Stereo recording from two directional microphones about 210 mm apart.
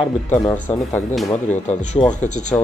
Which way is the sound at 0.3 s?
10° left (ahead or behind).